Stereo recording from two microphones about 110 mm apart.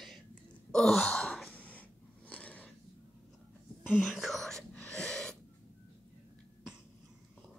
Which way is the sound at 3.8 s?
5° right (ahead or behind).